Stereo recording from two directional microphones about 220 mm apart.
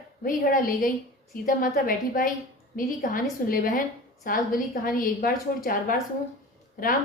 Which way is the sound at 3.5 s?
40° left (ahead or behind).